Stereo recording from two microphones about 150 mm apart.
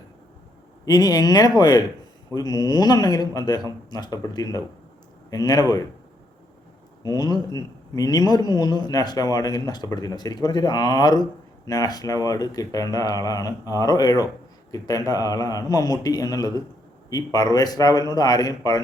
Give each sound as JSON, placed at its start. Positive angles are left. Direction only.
{"t": 0.9, "sound": "a man's voice", "side_deg": 25}
{"t": 7.0, "sound": "a man's voice", "side_deg": 25}